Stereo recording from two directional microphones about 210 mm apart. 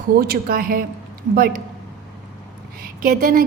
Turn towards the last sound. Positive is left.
turn(degrees=-45)  # may be behind; listen again after turning